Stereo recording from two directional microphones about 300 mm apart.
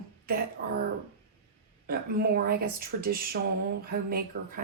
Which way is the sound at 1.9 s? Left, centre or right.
Right.